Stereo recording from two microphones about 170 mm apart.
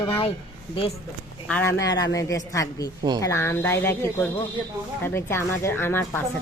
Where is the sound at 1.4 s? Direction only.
10° left (ahead or behind).